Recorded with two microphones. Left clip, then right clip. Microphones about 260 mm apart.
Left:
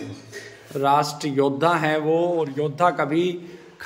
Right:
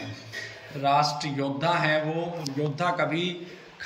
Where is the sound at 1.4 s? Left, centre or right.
Left.